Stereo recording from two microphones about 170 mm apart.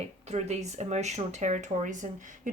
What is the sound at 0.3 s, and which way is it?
Speech, 40° right (ahead or behind).